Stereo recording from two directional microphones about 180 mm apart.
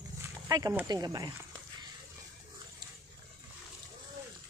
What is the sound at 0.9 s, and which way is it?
Speech, 20° right (ahead or behind).